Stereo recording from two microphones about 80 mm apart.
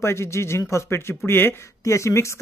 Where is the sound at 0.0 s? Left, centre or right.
Left.